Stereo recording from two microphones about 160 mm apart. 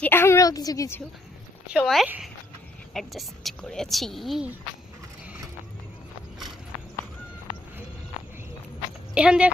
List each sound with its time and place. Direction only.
0.0 s a woman's voice: 15° left (ahead or behind)
1.6 s speech: 5° right (ahead or behind)
9.1 s speech: 5° right (ahead or behind)